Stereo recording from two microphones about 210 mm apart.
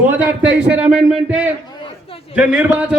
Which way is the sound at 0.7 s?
5° right (ahead or behind).